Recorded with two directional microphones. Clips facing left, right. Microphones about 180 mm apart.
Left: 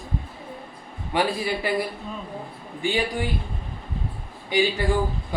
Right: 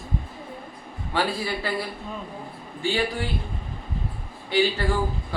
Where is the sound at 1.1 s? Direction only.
15° left (ahead or behind).